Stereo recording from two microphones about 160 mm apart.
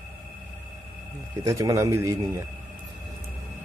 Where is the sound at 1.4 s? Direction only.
20° right (ahead or behind).